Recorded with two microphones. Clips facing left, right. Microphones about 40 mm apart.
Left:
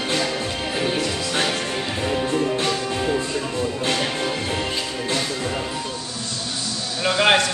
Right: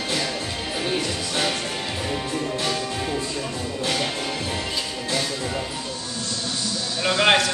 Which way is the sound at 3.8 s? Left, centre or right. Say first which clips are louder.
Even; left.